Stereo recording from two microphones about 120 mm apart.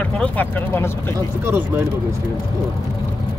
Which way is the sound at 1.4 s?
15° right (ahead or behind).